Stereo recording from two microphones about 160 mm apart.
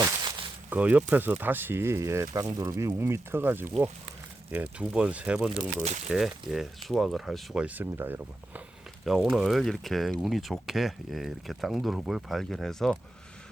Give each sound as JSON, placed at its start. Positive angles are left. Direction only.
{"t": 0.0, "sound": "a sound", "side_deg": -30}
{"t": 0.7, "sound": "speech", "side_deg": -10}
{"t": 9.0, "sound": "speech", "side_deg": 0}